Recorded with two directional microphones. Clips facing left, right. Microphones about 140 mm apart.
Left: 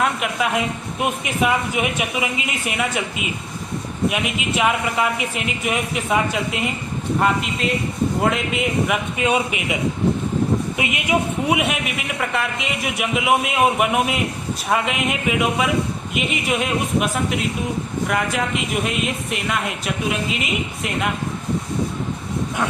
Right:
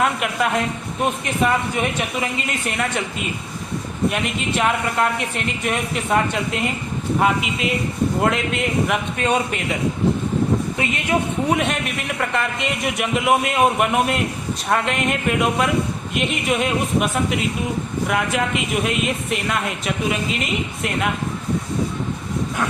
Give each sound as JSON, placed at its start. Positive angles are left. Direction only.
{"t": 0.0, "sound": "a woman's voice", "side_deg": 0}
{"t": 10.8, "sound": "a man's voice", "side_deg": 10}